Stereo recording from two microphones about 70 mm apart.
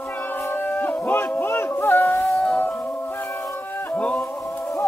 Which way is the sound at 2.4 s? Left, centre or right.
Left.